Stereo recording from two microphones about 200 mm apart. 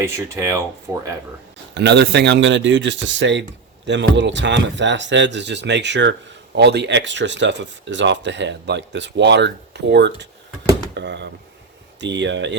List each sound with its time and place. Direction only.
0.0 s speech: 15° right (ahead or behind)
1.7 s speech: 60° right (ahead or behind)